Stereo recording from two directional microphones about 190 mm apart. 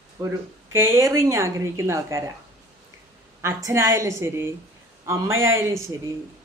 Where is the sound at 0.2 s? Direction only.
10° right (ahead or behind).